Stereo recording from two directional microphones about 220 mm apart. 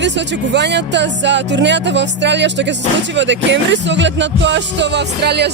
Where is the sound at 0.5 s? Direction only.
50° right (ahead or behind).